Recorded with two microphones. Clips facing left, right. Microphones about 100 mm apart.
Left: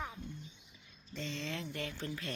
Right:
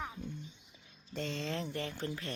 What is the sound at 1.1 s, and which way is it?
Speech, 55° right (ahead or behind).